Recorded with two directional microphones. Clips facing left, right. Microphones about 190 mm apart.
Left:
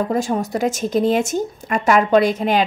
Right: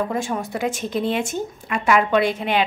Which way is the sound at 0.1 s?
40° left (ahead or behind).